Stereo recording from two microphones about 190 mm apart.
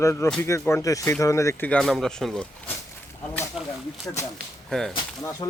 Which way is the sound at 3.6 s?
5° right (ahead or behind).